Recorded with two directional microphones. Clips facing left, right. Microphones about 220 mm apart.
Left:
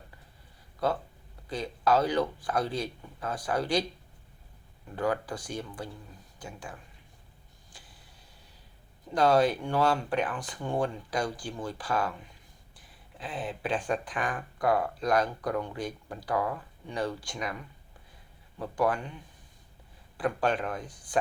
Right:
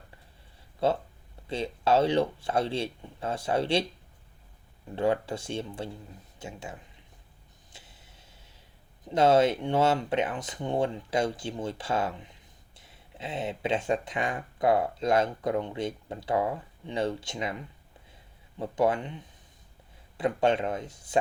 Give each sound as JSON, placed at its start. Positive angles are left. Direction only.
{"t": 0.8, "sound": "speech", "side_deg": -25}
{"t": 4.9, "sound": "speech", "side_deg": -25}
{"t": 7.7, "sound": "a sound", "side_deg": -25}
{"t": 9.0, "sound": "speech", "side_deg": -25}